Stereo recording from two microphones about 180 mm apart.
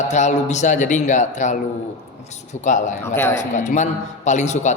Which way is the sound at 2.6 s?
45° left (ahead or behind).